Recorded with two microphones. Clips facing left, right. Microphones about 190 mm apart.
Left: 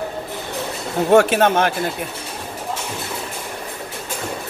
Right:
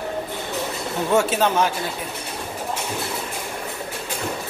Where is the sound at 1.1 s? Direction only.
60° left (ahead or behind).